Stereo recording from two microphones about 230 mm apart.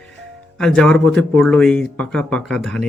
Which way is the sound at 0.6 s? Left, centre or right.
Centre.